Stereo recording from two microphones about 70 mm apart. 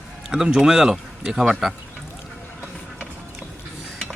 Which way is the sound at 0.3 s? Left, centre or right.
Centre.